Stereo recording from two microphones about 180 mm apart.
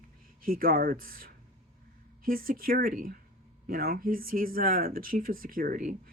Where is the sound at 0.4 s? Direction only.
50° right (ahead or behind).